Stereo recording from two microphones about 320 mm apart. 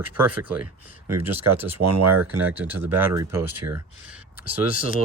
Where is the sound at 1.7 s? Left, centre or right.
Right.